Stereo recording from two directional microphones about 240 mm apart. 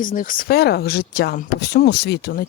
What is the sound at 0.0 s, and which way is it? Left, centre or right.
Speech, left.